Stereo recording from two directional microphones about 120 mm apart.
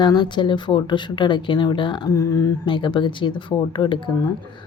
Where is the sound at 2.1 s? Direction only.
25° left (ahead or behind).